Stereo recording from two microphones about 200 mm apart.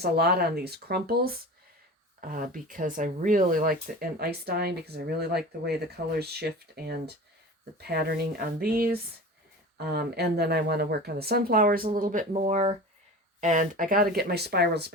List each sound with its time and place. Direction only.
0.0 s speech: 50° right (ahead or behind)
9.7 s speech: 55° right (ahead or behind)